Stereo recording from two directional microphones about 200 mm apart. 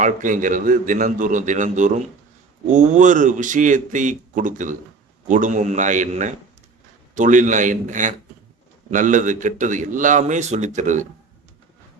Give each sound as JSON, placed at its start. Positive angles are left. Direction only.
{"t": 0.0, "sound": "a man's voice", "side_deg": -40}